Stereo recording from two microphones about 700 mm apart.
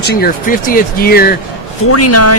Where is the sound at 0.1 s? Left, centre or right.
Centre.